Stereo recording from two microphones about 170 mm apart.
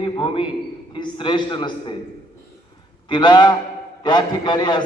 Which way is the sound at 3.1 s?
25° left (ahead or behind).